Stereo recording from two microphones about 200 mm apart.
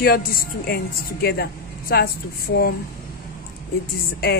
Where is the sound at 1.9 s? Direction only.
50° left (ahead or behind).